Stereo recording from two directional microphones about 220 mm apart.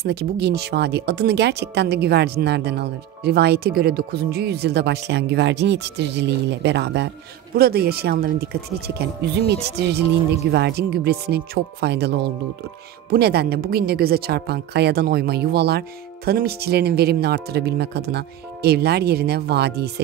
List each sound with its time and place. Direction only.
0.0 s speech: 50° right (ahead or behind)